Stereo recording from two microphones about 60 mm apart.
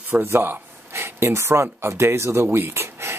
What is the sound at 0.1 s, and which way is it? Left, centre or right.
Speech, right.